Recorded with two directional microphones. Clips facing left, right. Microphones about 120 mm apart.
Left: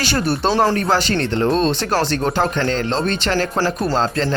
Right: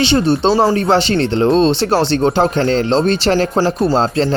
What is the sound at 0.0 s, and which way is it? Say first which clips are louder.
Speech: right 6 dB; 25° right (ahead or behind).